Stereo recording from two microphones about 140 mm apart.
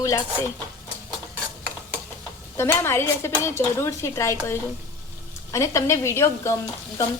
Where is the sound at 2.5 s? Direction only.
15° left (ahead or behind).